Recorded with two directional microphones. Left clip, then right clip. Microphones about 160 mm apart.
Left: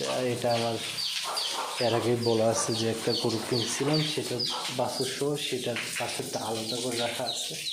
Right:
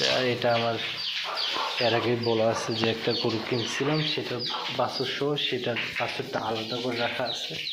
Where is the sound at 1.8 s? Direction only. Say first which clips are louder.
Even; 25° left (ahead or behind).